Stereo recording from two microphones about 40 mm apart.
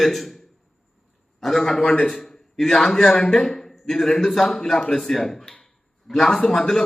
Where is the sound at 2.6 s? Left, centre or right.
Centre.